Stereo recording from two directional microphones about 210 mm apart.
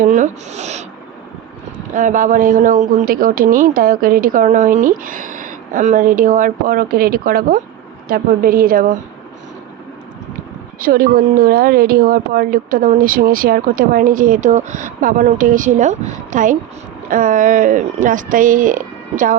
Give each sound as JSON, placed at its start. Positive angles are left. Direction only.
{"t": 0.0, "sound": "speech", "side_deg": -35}
{"t": 1.9, "sound": "speech", "side_deg": -35}
{"t": 10.8, "sound": "speech", "side_deg": -45}